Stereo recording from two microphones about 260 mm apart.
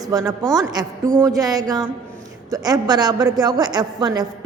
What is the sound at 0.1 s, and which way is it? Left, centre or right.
A woman's voice, centre.